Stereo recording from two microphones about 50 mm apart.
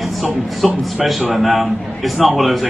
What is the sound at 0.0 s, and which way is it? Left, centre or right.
Music, centre.